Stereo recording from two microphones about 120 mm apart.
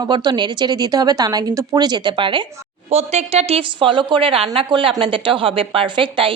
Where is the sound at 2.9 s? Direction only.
60° right (ahead or behind).